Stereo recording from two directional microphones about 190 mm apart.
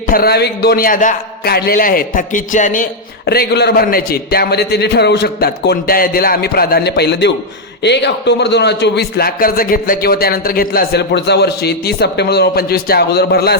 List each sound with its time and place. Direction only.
0.1 s a man's voice: 55° left (ahead or behind)
3.2 s a man's voice: 60° left (ahead or behind)